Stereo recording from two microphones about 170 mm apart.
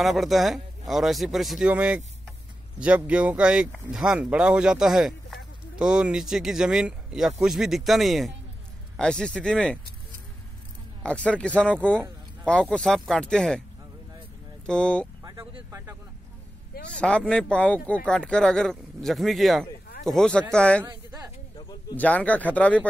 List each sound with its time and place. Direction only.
0.0 s speech: centre (ahead or behind)
11.0 s speech: 5° left (ahead or behind)
14.7 s speech: 5° left (ahead or behind)
15.2 s speech: 20° right (ahead or behind)
17.0 s speech: 5° left (ahead or behind)
20.8 s a sound: 20° right (ahead or behind)
21.5 s a sound: 20° left (ahead or behind)
21.9 s speech: 10° left (ahead or behind)